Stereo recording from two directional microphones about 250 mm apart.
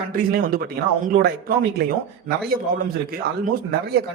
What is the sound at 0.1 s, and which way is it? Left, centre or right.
Speech, right.